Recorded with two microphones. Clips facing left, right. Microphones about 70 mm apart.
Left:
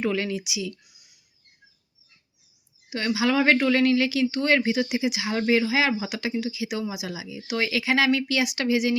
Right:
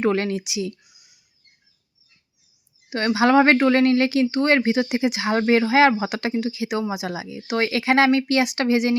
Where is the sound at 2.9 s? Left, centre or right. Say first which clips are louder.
Right 6 dB; right.